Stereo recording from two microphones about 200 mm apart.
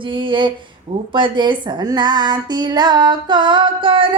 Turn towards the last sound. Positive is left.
turn(degrees=-25)  # may be behind; listen again after turning